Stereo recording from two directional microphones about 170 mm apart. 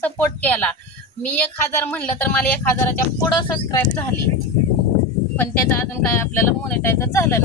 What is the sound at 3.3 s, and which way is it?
Speech, 25° left (ahead or behind).